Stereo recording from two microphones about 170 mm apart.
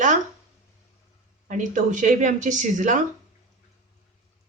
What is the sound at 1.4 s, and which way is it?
A woman's voice, 50° right (ahead or behind).